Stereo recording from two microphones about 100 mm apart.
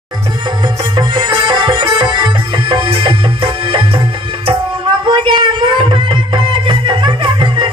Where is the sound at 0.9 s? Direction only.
45° right (ahead or behind).